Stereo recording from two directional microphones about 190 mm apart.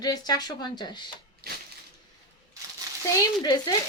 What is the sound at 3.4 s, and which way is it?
Speech, 20° left (ahead or behind).